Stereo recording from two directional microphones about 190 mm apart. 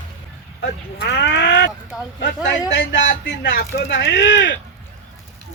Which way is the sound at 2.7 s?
70° left (ahead or behind).